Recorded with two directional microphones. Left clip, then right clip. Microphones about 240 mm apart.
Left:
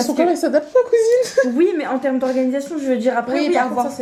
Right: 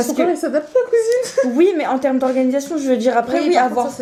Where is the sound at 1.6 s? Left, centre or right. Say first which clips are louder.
Right 3 dB; right.